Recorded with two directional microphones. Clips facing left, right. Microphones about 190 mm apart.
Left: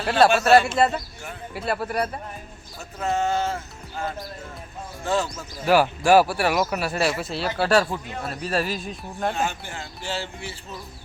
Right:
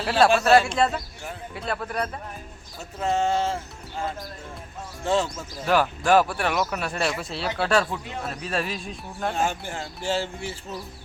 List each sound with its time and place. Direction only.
0.0 s speech: centre (ahead or behind)
3.0 s a sound: 25° right (ahead or behind)
5.2 s speech: 10° left (ahead or behind)
9.3 s speech: 45° right (ahead or behind)